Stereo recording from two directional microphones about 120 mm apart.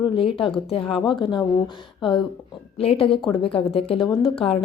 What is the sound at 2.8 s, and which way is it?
A woman's voice, 50° left (ahead or behind).